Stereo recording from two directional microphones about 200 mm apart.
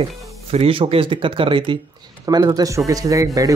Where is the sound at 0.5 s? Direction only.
30° right (ahead or behind).